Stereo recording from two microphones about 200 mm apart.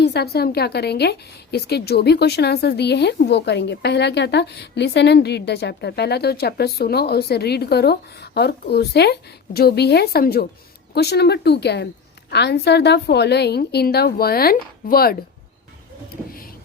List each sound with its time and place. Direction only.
0.0 s a woman's voice: 55° left (ahead or behind)